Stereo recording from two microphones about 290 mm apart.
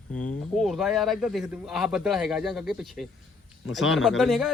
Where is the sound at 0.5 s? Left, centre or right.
Centre.